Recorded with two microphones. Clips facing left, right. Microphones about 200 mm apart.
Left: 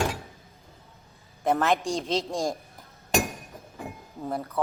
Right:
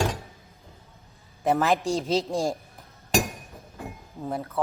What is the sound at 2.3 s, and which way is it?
Speech, 30° right (ahead or behind).